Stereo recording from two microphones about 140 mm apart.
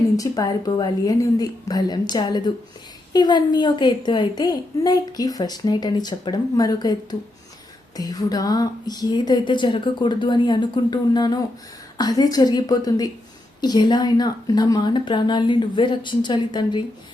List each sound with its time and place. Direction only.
0.2 s a woman's voice: 25° left (ahead or behind)